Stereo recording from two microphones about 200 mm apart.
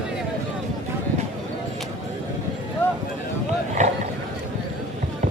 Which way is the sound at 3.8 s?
35° right (ahead or behind).